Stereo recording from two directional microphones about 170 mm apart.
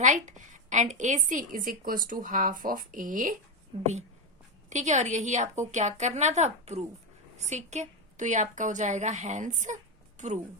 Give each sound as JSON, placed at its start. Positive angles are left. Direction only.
{"t": 0.0, "sound": "a woman's voice", "side_deg": -45}
{"t": 3.7, "sound": "a woman's voice", "side_deg": -35}